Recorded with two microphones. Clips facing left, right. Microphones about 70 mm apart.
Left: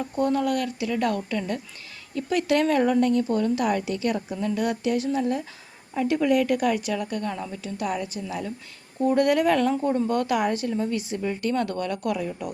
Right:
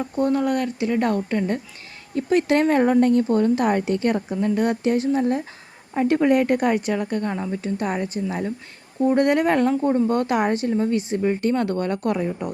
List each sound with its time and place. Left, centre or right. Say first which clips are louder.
0.0 s speech: right 3 dB; right